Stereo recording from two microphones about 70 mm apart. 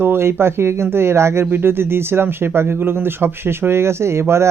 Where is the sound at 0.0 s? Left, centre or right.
Right.